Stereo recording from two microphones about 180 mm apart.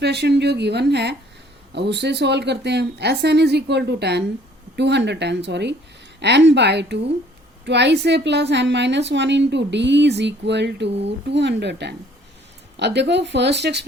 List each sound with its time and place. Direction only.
0.0 s a woman's voice: 65° right (ahead or behind)